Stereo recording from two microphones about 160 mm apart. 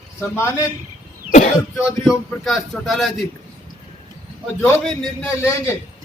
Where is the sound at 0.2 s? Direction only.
15° left (ahead or behind).